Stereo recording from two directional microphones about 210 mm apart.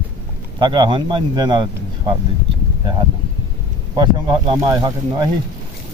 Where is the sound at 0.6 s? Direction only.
20° right (ahead or behind).